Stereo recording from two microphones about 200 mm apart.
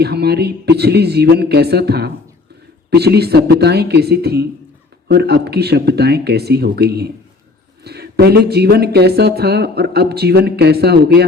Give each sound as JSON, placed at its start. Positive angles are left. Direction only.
{"t": 0.0, "sound": "speech", "side_deg": -55}